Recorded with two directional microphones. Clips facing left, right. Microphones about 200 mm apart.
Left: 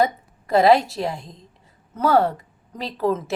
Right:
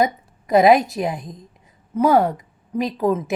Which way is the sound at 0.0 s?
15° right (ahead or behind).